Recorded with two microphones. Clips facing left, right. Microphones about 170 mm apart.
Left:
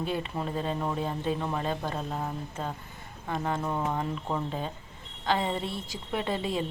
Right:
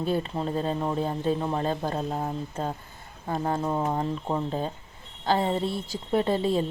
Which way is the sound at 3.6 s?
20° right (ahead or behind).